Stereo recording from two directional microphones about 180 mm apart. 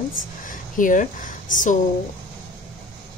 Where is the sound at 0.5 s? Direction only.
45° left (ahead or behind).